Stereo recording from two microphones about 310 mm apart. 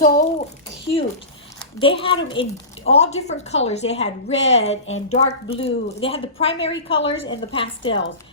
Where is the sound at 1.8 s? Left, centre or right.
Centre.